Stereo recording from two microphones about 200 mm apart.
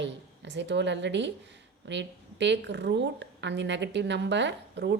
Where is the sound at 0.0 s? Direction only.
60° right (ahead or behind).